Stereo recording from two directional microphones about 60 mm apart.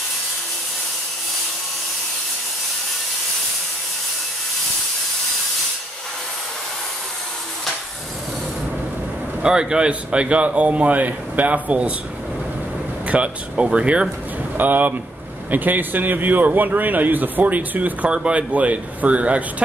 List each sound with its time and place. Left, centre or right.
9.4 s a man's voice: centre
13.0 s a man's voice: right
14.6 s a man's voice: right